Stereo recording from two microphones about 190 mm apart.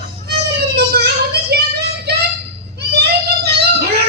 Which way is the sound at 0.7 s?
60° right (ahead or behind).